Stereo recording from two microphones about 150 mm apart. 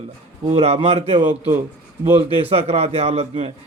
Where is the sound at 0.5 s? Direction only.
40° right (ahead or behind).